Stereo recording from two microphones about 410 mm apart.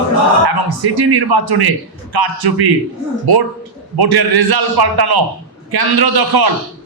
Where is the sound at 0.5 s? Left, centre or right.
Right.